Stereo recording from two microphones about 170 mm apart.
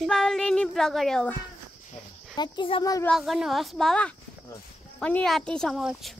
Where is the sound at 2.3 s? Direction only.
25° left (ahead or behind).